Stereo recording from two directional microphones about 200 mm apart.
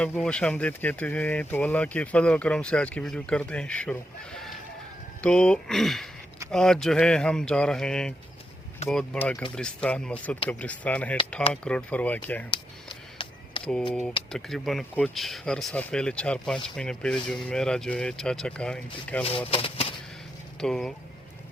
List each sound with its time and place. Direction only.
0.0 s speech: 5° left (ahead or behind)
12.5 s a sound: 25° left (ahead or behind)
14.3 s speech: centre (ahead or behind)
19.5 s speech: 25° left (ahead or behind)
20.6 s speech: 5° left (ahead or behind)